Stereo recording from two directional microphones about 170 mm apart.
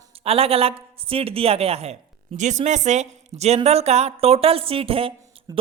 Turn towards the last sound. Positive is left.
turn(degrees=-20)  # may be behind; listen again after turning